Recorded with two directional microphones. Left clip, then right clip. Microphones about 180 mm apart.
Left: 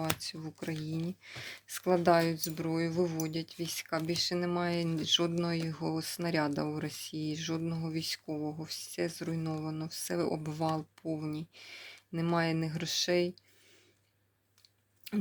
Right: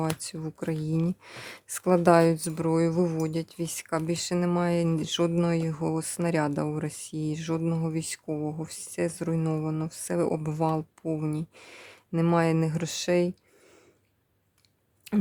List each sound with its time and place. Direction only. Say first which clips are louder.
0.0 s speech: right 4 dB; 35° right (ahead or behind)